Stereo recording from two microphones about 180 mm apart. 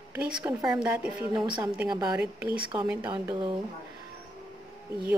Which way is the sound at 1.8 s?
25° right (ahead or behind).